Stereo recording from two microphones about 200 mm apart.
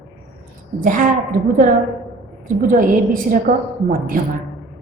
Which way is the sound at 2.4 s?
45° right (ahead or behind).